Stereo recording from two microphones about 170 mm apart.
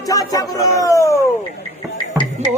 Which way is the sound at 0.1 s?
20° left (ahead or behind).